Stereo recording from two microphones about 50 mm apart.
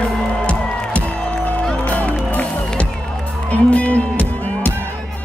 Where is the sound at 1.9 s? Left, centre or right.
Left.